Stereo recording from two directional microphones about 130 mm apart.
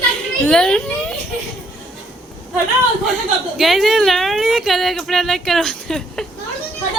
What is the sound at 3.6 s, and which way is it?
A woman's voice, centre (ahead or behind).